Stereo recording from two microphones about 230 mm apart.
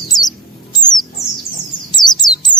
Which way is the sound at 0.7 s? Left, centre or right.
Centre.